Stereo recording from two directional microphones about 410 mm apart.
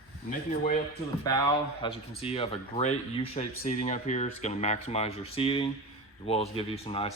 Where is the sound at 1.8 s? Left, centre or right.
Centre.